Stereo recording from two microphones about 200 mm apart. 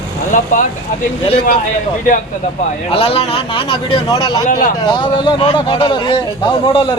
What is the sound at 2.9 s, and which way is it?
Speech, 30° left (ahead or behind).